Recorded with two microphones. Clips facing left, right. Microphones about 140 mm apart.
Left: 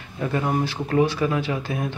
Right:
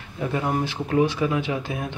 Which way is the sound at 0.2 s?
15° right (ahead or behind).